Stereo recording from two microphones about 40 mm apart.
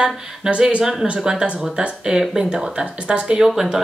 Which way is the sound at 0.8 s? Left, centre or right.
Centre.